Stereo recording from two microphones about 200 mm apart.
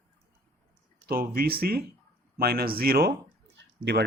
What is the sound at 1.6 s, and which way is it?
Speech, 50° right (ahead or behind).